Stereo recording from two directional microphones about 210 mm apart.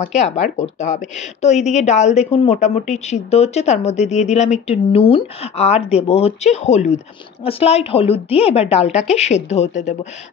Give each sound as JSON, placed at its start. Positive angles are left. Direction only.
{"t": 0.0, "sound": "a woman's voice", "side_deg": 35}